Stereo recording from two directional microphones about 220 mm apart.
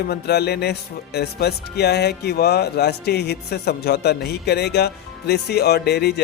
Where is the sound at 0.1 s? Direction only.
45° left (ahead or behind).